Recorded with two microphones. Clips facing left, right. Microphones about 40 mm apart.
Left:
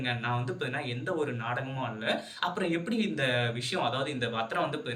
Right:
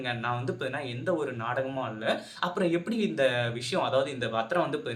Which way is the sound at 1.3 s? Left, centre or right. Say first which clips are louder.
Right 3 dB; centre.